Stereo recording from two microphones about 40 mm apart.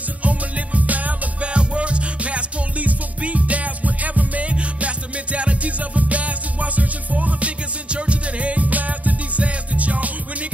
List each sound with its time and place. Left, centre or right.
0.2 s music: right